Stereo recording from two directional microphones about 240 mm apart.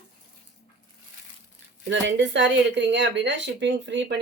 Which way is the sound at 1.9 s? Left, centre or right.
Right.